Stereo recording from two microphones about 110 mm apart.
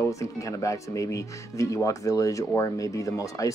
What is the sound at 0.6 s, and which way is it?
Speech, 30° left (ahead or behind).